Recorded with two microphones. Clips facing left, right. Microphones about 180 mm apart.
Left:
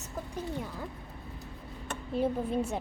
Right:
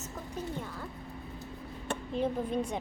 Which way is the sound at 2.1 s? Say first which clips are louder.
Left 2 dB; 5° left (ahead or behind).